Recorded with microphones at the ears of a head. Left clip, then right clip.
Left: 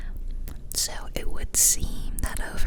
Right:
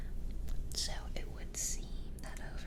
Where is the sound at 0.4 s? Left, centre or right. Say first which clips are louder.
Left 10 dB; left.